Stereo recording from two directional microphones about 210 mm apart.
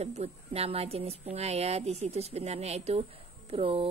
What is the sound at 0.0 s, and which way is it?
Speech, 30° right (ahead or behind).